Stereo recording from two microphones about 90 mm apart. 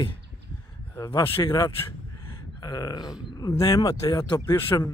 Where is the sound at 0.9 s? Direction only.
30° left (ahead or behind).